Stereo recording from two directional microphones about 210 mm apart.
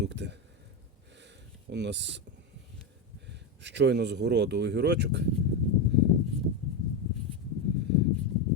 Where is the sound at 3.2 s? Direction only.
55° right (ahead or behind).